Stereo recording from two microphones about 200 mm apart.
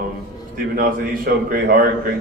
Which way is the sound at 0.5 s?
45° right (ahead or behind).